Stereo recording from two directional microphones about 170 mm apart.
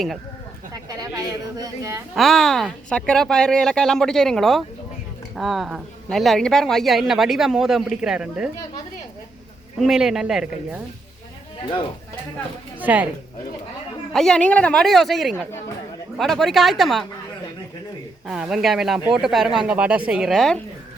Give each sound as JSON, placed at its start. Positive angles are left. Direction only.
{"t": 0.9, "sound": "speech", "side_deg": -20}
{"t": 2.1, "sound": "a man's voice", "side_deg": 0}
{"t": 9.8, "sound": "a man's voice", "side_deg": -5}
{"t": 12.8, "sound": "a woman's voice", "side_deg": -10}
{"t": 14.1, "sound": "a man's voice", "side_deg": 0}
{"t": 18.3, "sound": "a man's voice", "side_deg": -5}